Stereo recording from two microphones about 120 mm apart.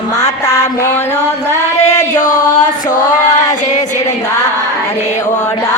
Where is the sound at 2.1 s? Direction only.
90° left.